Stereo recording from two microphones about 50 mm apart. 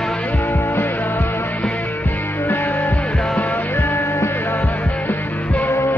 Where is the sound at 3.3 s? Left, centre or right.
Left.